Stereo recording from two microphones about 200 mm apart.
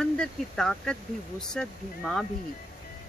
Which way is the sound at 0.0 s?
5° left (ahead or behind).